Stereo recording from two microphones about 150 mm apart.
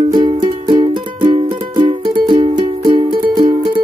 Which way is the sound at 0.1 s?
30° right (ahead or behind).